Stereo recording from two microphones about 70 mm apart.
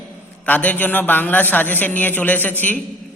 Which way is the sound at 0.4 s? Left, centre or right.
Left.